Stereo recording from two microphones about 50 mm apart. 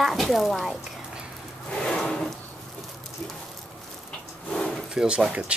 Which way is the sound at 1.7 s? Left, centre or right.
Centre.